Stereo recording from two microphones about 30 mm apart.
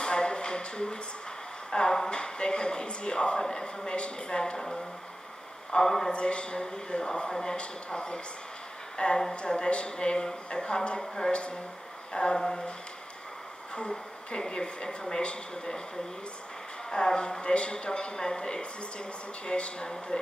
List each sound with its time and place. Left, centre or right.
0.0 s a sound: left
1.7 s speech: left
5.9 s a man's voice: centre
6.1 s speech: left
7.2 s speech: left
11.0 s speech: left
11.3 s speech: left
13.7 s speech: left
16.9 s speech: left